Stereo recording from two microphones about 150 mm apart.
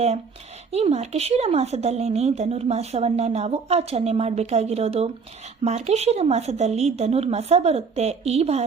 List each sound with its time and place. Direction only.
0.7 s a woman's voice: 45° right (ahead or behind)